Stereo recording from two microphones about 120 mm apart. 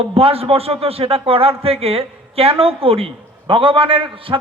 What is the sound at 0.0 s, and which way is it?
A man's voice, 50° right (ahead or behind).